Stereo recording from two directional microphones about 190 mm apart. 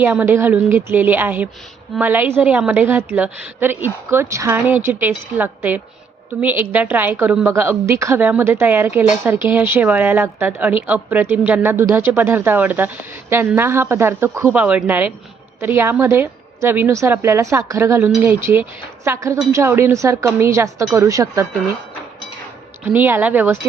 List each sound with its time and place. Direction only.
0.0 s a woman's voice: 10° right (ahead or behind)
22.9 s a woman's voice: 10° right (ahead or behind)